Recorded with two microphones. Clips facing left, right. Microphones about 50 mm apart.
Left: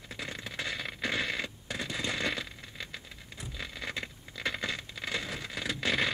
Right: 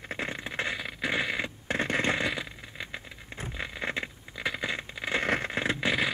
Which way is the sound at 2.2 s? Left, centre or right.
Centre.